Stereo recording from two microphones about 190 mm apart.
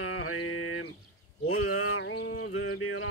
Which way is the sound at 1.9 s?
90° left.